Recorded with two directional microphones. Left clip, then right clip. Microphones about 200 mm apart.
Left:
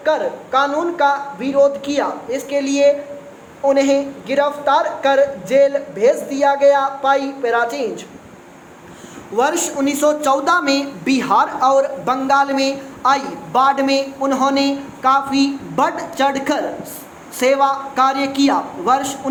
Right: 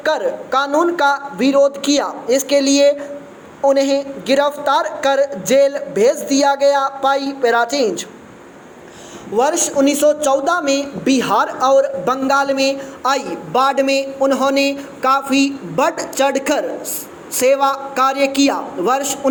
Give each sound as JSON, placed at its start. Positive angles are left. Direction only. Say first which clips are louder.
{"t": 0.0, "sound": "a woman's voice", "louder": "even", "side_deg": -30}
{"t": 9.3, "sound": "a woman's voice", "louder": "right 2 dB", "side_deg": -20}